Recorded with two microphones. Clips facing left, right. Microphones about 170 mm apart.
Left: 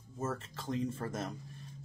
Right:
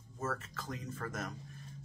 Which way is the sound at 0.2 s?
25° left (ahead or behind).